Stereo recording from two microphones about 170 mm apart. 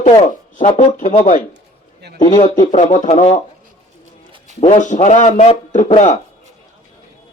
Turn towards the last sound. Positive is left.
turn(degrees=45)  # may be behind; listen again after turning